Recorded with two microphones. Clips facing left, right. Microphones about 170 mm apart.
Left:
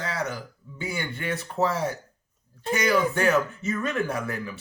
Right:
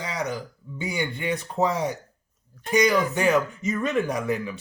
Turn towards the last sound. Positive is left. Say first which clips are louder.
# right 4 dB
turn(degrees=-15)  # may be behind; listen again after turning